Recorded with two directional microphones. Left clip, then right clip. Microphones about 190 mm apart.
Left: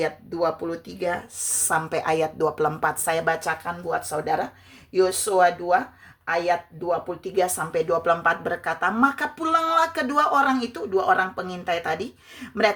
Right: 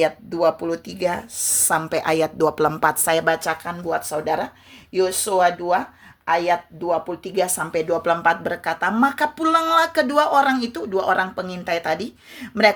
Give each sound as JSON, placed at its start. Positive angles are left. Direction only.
{"t": 0.0, "sound": "speech", "side_deg": -35}